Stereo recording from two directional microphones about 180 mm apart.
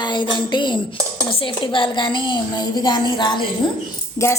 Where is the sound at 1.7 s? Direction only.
25° left (ahead or behind).